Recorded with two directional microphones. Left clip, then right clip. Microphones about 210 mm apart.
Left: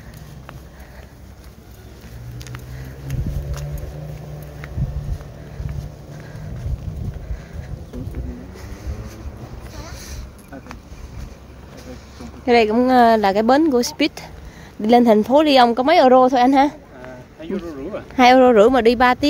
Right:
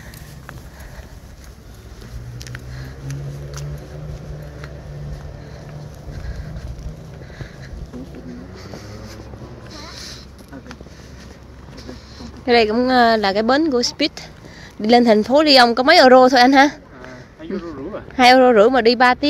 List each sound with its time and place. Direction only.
12.4 s a woman's voice: 15° left (ahead or behind)
14.8 s speech: 10° left (ahead or behind)
17.4 s a sound: 10° right (ahead or behind)
18.1 s speech: 15° left (ahead or behind)